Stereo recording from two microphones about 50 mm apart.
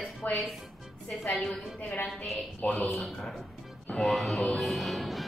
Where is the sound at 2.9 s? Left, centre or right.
Centre.